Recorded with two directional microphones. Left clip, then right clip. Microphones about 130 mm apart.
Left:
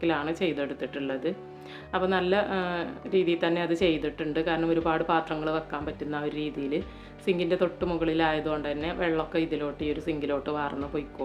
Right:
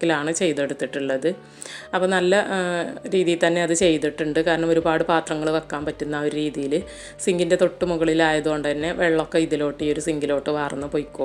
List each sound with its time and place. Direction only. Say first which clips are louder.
0.0 s speech: right 6 dB; 40° right (ahead or behind)